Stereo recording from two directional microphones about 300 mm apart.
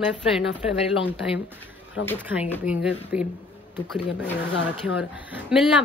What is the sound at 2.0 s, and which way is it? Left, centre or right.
Speech, left.